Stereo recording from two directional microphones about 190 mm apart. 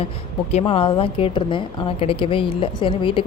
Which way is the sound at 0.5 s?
30° left (ahead or behind).